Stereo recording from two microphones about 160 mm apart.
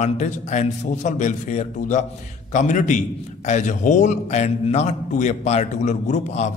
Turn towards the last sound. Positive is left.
turn(degrees=45)  # may be behind; listen again after turning